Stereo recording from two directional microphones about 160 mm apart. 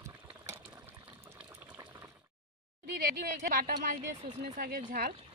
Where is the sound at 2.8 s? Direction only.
85° right.